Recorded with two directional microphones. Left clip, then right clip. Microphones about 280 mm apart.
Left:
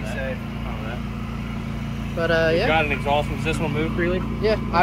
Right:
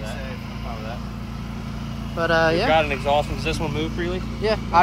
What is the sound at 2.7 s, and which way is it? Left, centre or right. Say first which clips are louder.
Speech: right 1 dB; right.